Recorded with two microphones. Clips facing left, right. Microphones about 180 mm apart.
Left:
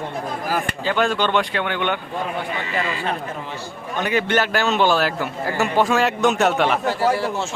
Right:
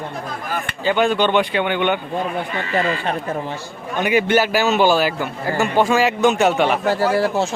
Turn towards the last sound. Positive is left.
turn(degrees=-40)  # may be behind; listen again after turning